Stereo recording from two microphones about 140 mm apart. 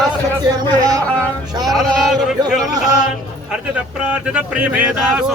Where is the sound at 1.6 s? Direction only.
Centre (ahead or behind).